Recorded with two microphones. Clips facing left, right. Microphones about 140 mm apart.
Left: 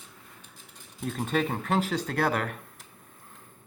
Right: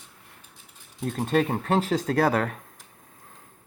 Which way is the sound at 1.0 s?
40° right (ahead or behind).